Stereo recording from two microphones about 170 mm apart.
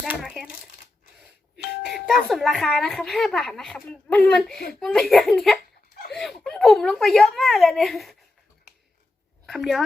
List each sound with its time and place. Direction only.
0.2 s crumpling: centre (ahead or behind)
1.2 s a woman's voice: 5° right (ahead or behind)
5.9 s a sound: 55° left (ahead or behind)
6.1 s a woman's voice: centre (ahead or behind)
9.5 s a woman's voice: centre (ahead or behind)